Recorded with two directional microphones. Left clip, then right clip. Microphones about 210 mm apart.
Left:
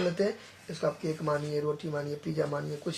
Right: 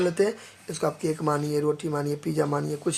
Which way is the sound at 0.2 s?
45° right (ahead or behind).